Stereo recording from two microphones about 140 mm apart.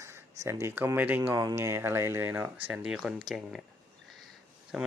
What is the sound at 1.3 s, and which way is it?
Speech, 20° right (ahead or behind).